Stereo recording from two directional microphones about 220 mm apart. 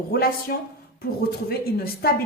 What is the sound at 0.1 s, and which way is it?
A woman's voice, 45° left (ahead or behind).